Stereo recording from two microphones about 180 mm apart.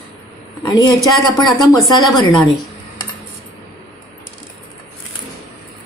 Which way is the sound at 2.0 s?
Centre (ahead or behind).